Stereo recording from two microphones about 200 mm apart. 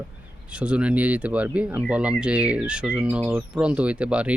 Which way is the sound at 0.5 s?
5° right (ahead or behind).